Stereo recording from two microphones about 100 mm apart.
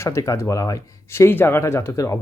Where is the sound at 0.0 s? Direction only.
30° left (ahead or behind).